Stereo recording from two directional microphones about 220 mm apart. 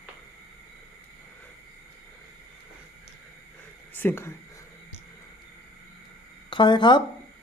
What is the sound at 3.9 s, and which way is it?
Speech, 10° left (ahead or behind).